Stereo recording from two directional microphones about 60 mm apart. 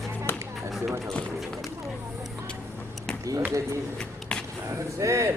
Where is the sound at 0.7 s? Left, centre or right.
Centre.